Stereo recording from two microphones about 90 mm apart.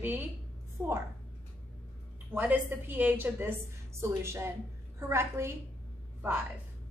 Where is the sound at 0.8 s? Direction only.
20° right (ahead or behind).